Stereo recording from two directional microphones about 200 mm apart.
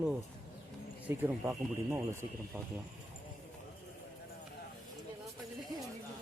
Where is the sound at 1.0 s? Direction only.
10° right (ahead or behind).